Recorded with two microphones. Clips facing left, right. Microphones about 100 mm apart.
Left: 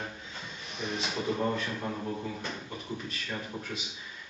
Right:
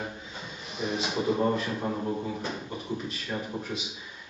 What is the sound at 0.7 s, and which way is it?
A man's voice, 5° right (ahead or behind).